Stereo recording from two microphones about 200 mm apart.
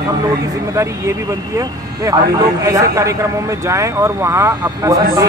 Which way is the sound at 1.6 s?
15° right (ahead or behind).